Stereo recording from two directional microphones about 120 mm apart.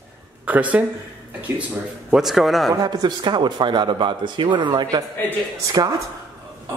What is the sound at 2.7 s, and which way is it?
Speech, 35° right (ahead or behind).